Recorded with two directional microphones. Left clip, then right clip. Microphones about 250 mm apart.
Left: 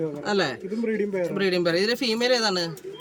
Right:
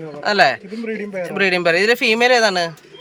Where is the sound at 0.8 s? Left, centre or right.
Centre.